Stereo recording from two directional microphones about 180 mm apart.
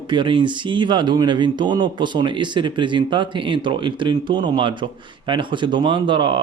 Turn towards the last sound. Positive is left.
turn(degrees=-25)  # may be behind; listen again after turning